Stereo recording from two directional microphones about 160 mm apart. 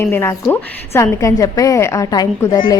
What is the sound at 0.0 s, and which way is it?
A woman's voice, 15° left (ahead or behind).